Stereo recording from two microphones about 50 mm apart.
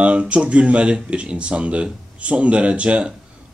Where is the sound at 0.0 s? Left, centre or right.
Right.